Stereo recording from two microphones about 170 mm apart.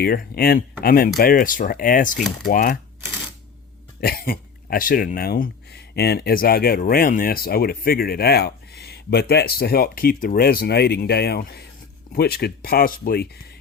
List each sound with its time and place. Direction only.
0.0 s speech: 60° left (ahead or behind)
2.1 s speech: centre (ahead or behind)
2.5 s speech: 55° left (ahead or behind)
4.0 s speech: 60° left (ahead or behind)